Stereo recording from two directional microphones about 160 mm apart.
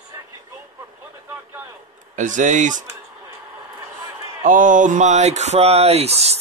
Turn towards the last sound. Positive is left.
turn(degrees=-40)  # may be behind; listen again after turning